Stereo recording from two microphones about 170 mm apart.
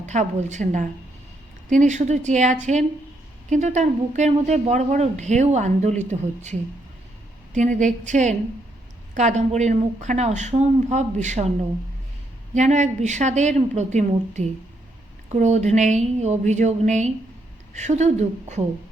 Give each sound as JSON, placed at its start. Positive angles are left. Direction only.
{"t": 0.0, "sound": "speech", "side_deg": -45}
{"t": 12.5, "sound": "speech", "side_deg": -45}